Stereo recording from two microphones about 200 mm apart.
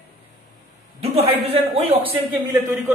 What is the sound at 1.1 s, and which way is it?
Speech, 30° right (ahead or behind).